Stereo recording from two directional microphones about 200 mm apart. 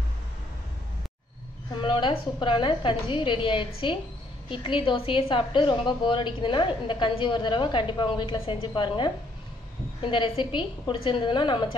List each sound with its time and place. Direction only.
1.8 s a woman's voice: 25° left (ahead or behind)